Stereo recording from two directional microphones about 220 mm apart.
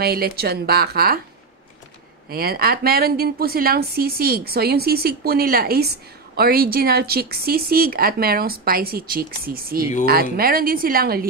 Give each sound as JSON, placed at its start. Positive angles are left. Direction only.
{"t": 0.0, "sound": "a woman's voice", "side_deg": -45}
{"t": 2.2, "sound": "a woman's voice", "side_deg": -45}